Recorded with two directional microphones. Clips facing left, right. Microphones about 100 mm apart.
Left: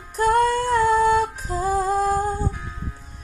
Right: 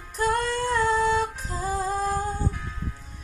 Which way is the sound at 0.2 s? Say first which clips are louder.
Left 6 dB; 45° left (ahead or behind).